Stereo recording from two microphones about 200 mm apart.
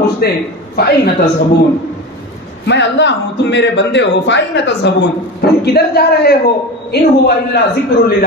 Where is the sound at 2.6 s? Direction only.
60° left (ahead or behind).